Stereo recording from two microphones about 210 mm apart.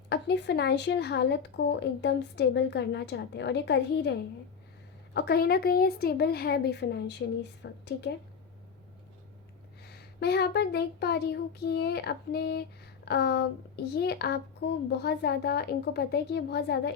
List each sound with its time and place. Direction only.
0.1 s speech: 55° left (ahead or behind)
5.1 s speech: 50° left (ahead or behind)
9.8 s speech: 50° left (ahead or behind)